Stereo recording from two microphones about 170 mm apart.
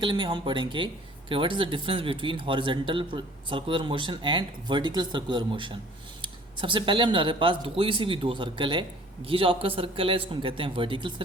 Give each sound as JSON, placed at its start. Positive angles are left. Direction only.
{"t": 0.0, "sound": "a man's voice", "side_deg": -30}